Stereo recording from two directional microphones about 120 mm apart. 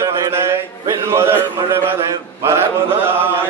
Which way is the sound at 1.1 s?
20° right (ahead or behind).